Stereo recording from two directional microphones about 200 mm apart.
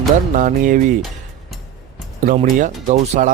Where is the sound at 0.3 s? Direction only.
40° right (ahead or behind).